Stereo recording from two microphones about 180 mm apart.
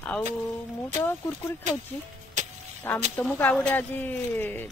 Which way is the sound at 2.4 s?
40° right (ahead or behind).